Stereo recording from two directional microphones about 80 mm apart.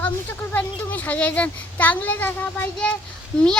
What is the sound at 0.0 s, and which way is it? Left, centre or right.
A child's voice, left.